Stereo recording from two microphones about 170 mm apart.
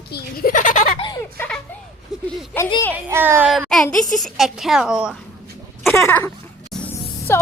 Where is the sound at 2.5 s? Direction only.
10° left (ahead or behind).